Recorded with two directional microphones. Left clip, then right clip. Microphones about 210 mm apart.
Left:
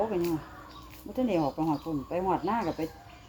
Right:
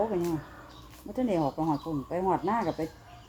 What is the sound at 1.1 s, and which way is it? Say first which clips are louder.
Speech: even; 10° left (ahead or behind).